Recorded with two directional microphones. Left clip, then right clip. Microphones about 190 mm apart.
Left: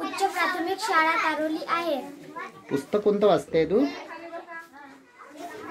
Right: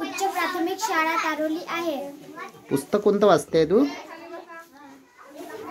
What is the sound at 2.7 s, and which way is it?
Speech, 35° right (ahead or behind).